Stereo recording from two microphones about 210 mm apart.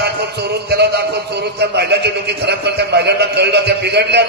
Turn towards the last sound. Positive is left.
turn(degrees=-50)  # may be behind; listen again after turning